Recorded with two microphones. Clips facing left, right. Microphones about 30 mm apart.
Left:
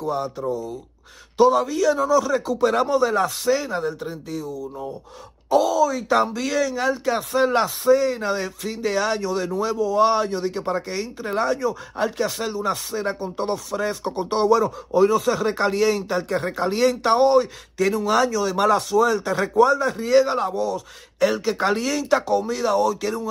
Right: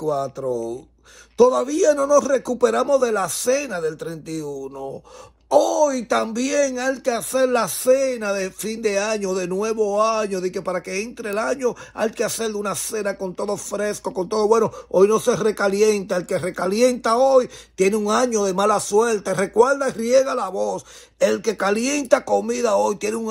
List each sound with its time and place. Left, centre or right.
0.0 s speech: left
1.6 s a man's voice: left
3.3 s speech: left
3.7 s speech: centre
4.3 s a man's voice: left
20.5 s a man's voice: left